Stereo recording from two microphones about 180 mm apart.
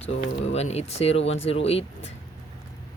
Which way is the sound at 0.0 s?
35° left (ahead or behind).